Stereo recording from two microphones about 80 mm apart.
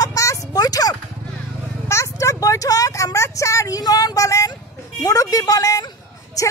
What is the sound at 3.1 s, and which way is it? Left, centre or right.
A woman's voice, left.